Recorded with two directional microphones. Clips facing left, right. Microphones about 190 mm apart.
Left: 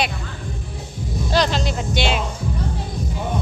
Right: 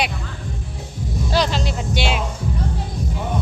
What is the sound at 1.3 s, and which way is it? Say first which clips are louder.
Speech: left 1 dB; 5° right (ahead or behind).